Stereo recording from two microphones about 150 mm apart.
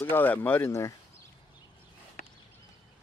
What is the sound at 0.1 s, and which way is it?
Speech, 15° left (ahead or behind).